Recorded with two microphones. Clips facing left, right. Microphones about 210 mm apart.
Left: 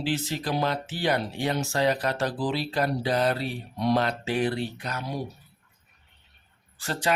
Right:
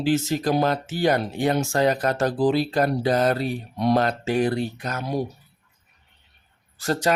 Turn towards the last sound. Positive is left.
turn(degrees=-40)  # may be behind; listen again after turning